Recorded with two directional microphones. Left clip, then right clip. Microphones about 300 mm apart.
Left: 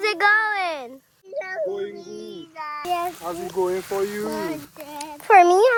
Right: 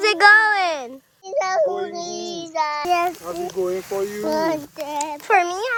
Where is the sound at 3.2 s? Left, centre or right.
Left.